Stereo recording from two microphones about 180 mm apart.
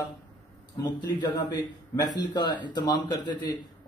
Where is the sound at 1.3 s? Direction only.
20° left (ahead or behind).